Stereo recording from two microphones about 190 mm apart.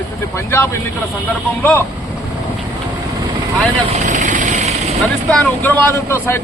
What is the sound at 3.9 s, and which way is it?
Vehicle, 40° right (ahead or behind).